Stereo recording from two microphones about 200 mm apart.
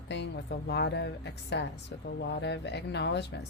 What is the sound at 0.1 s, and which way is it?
A woman's voice, 60° left (ahead or behind).